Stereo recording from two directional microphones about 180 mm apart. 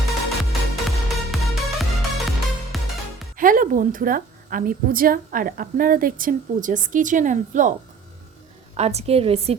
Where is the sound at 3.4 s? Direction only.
50° right (ahead or behind).